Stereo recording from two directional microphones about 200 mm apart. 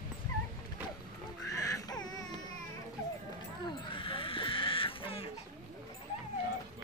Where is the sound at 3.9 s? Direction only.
25° left (ahead or behind).